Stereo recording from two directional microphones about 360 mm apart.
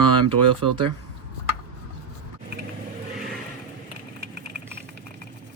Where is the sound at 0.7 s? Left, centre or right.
Right.